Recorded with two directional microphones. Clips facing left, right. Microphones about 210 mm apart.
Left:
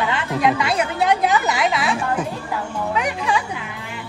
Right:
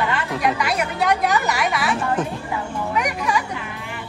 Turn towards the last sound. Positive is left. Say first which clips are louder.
# left 1 dB
turn(degrees=25)  # may be behind; listen again after turning